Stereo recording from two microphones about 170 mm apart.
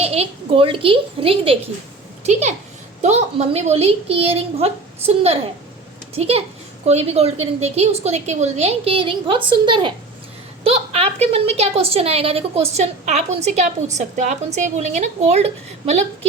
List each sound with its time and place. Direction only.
0.0 s a woman's voice: 35° right (ahead or behind)